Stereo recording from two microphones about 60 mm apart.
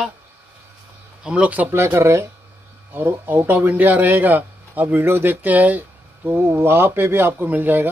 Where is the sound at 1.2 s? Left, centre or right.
Centre.